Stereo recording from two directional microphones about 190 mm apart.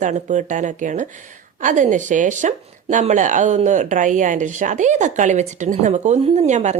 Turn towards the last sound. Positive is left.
turn(degrees=-35)  # may be behind; listen again after turning